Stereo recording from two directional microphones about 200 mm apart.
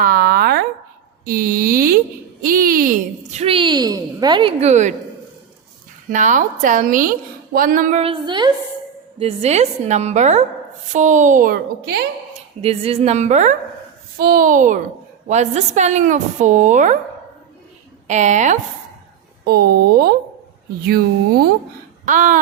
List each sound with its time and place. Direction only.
0.0 s a sound: 45° right (ahead or behind)
1.2 s a woman's voice: 45° right (ahead or behind)
6.1 s a woman's voice: 40° right (ahead or behind)
12.6 s a woman's voice: 30° right (ahead or behind)
18.1 s a woman's voice: 35° right (ahead or behind)
19.5 s speech: 50° right (ahead or behind)
22.0 s a sound: 40° right (ahead or behind)